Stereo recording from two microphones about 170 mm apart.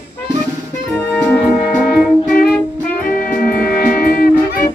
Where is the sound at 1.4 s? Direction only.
Centre (ahead or behind).